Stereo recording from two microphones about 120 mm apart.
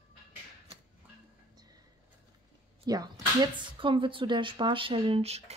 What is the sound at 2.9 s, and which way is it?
Speech, 35° right (ahead or behind).